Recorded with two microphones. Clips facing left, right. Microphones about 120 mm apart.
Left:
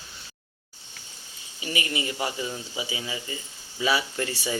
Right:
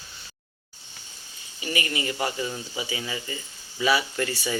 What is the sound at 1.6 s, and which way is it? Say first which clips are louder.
Speech: right 1 dB; 20° left (ahead or behind).